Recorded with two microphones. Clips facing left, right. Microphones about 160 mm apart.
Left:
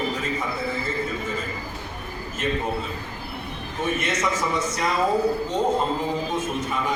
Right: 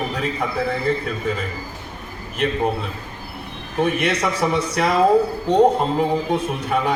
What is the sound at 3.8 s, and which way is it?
A man's voice, 65° right (ahead or behind).